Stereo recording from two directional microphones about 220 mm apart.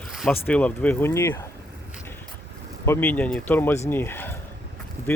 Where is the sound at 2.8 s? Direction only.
10° left (ahead or behind).